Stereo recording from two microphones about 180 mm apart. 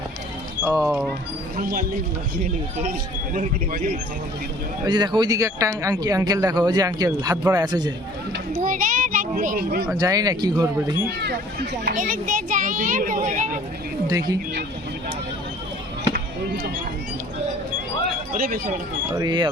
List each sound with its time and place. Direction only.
0.6 s speech: 15° right (ahead or behind)
3.3 s a child's voice: 50° right (ahead or behind)
4.9 s a man's voice: 25° right (ahead or behind)
8.3 s a child's voice: 50° right (ahead or behind)
10.0 s a man's voice: 20° right (ahead or behind)
11.9 s a child's voice: 50° right (ahead or behind)
14.1 s a man's voice: 20° right (ahead or behind)
18.3 s a child's voice: 55° right (ahead or behind)
19.1 s a man's voice: 25° right (ahead or behind)